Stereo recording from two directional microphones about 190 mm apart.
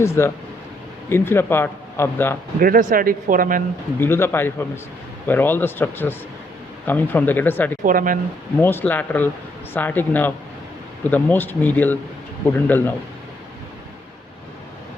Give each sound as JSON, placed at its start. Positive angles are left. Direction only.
{"t": 0.0, "sound": "speech", "side_deg": 15}
{"t": 2.6, "sound": "speech", "side_deg": -50}
{"t": 4.0, "sound": "speech", "side_deg": 10}
{"t": 7.9, "sound": "speech", "side_deg": -45}
{"t": 8.6, "sound": "speech", "side_deg": 10}